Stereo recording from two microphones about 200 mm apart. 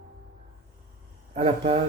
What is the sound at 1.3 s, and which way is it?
Speech, 30° right (ahead or behind).